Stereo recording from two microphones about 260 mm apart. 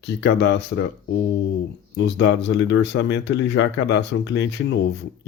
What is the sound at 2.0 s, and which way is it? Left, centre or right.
Speech, left.